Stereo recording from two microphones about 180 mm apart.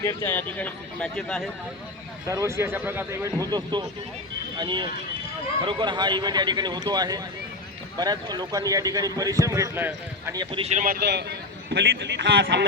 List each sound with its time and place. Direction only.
0.0 s speech: 15° left (ahead or behind)
2.2 s speech: 15° right (ahead or behind)
10.3 s speech: 25° right (ahead or behind)
10.8 s a man's voice: 60° right (ahead or behind)